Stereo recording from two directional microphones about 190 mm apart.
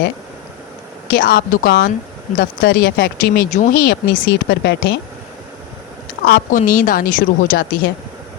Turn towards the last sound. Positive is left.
turn(degrees=45)  # may be behind; listen again after turning